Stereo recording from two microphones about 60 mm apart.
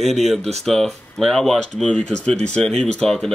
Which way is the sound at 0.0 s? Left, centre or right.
Centre.